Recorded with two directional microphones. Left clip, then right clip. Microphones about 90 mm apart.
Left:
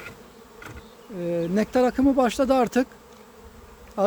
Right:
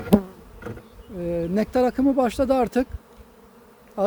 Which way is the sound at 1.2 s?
10° right (ahead or behind).